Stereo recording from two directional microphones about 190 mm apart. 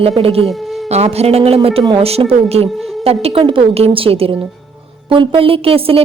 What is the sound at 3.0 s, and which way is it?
A woman's voice, 30° right (ahead or behind).